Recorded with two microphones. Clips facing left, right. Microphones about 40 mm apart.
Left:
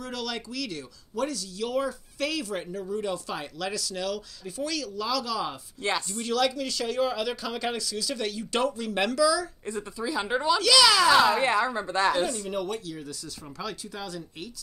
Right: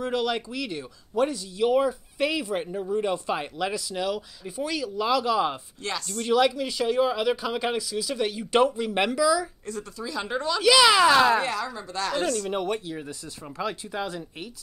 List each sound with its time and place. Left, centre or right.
0.0 s speech: right
5.8 s a woman's voice: left
6.2 s speech: centre
9.7 s speech: left
10.6 s speech: centre
11.4 s a woman's voice: left
12.4 s speech: right